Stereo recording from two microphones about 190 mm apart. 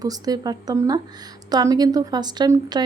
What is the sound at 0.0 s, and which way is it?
A woman's voice, 20° right (ahead or behind).